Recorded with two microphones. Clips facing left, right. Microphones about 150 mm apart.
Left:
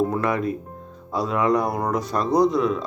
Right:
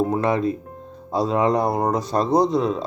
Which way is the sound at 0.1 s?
25° right (ahead or behind).